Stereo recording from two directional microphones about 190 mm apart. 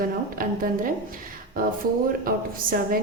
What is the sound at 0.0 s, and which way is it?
A woman's voice, 50° right (ahead or behind).